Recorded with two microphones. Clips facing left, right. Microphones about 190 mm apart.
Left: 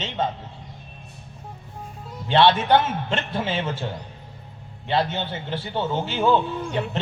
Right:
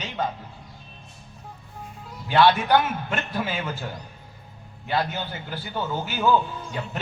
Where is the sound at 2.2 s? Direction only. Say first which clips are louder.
Left 1 dB; 25° left (ahead or behind).